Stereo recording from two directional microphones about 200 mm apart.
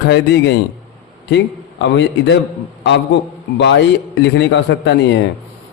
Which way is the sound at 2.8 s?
60° left (ahead or behind).